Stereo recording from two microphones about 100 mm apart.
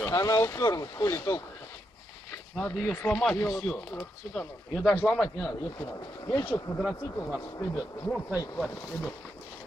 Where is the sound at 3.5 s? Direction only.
5° left (ahead or behind).